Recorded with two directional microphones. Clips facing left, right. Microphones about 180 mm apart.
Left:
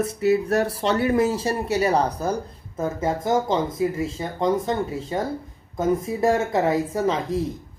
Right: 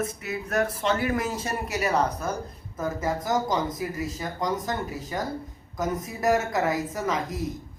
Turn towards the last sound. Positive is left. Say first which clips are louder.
# left 6 dB
turn(degrees=30)  # may be behind; listen again after turning